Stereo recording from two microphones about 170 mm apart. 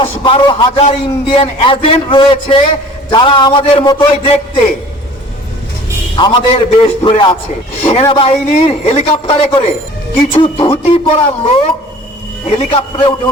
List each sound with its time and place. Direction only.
0.0 s a man's voice: 30° left (ahead or behind)
6.1 s a man's voice: 30° left (ahead or behind)